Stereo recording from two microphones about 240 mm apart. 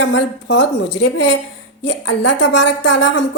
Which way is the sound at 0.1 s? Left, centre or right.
Left.